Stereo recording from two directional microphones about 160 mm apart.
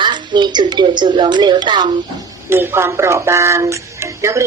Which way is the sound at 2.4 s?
15° right (ahead or behind).